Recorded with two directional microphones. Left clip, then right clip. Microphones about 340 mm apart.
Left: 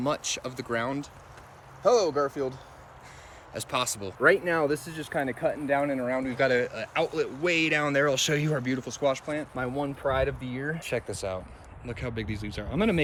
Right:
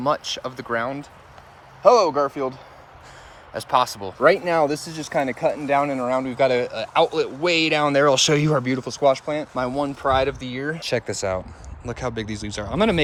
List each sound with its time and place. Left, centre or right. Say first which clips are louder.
0.4 s speech: right 6 dB; centre
1.8 s speech: right 8 dB; centre
3.5 s speech: right 10 dB; centre
4.2 s speech: right 6 dB; centre
11.9 s speech: right 7 dB; centre